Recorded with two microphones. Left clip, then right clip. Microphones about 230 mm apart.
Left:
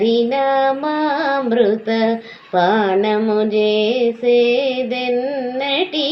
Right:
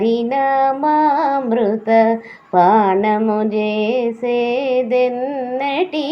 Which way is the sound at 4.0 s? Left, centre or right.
Right.